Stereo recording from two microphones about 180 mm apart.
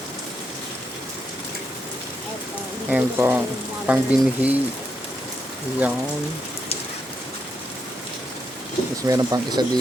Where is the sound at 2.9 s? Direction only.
10° right (ahead or behind).